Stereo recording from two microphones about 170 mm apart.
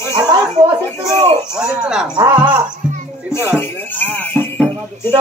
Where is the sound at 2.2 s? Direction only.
25° right (ahead or behind).